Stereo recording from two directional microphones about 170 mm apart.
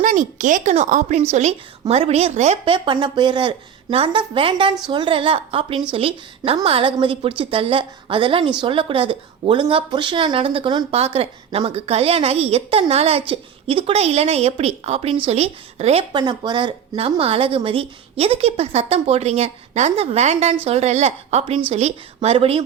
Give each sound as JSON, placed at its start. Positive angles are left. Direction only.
{"t": 0.0, "sound": "a woman's voice", "side_deg": -50}
{"t": 2.7, "sound": "a woman's voice", "side_deg": -25}
{"t": 16.1, "sound": "a woman's voice", "side_deg": -25}